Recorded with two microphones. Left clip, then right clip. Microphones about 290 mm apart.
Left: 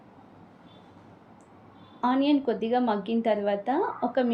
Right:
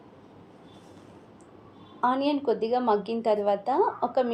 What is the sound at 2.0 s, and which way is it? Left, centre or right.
A woman's voice, centre.